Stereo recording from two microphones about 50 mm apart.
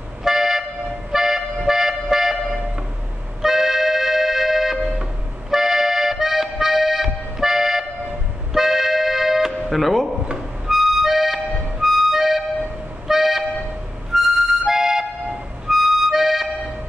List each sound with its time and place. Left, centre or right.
0.2 s toot: centre
1.1 s music: centre
3.4 s music: centre
5.5 s accordion: centre
8.5 s music: centre
10.7 s harmonica: centre
13.1 s toot: centre
14.1 s music: centre